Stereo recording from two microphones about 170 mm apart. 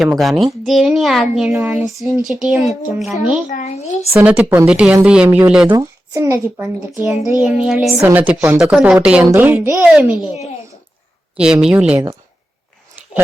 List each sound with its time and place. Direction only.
0.0 s a child's voice: centre (ahead or behind)
3.5 s a child's voice: 45° left (ahead or behind)
4.1 s a woman's voice: 10° right (ahead or behind)
7.4 s a child's voice: centre (ahead or behind)
7.9 s a woman's voice: 10° right (ahead or behind)
11.4 s a woman's voice: 5° right (ahead or behind)